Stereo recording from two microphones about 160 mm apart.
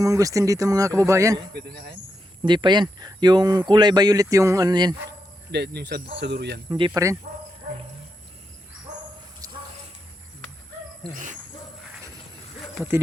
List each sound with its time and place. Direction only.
0.0 s speech: 20° right (ahead or behind)
1.5 s speech: 90° right
2.5 s speech: 30° right (ahead or behind)
5.5 s speech: 90° right
6.7 s speech: 25° right (ahead or behind)
7.3 s dog: 60° right (ahead or behind)